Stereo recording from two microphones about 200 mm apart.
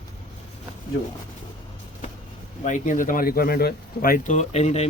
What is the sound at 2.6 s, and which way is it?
Speech, 40° left (ahead or behind).